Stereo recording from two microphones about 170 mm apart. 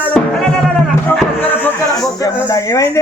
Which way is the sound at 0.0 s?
5° left (ahead or behind).